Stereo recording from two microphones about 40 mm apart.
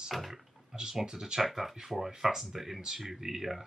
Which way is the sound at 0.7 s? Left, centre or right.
Centre.